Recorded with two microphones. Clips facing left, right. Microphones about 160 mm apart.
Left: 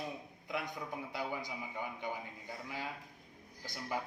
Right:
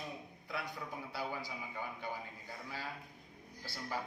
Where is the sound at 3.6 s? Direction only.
15° left (ahead or behind).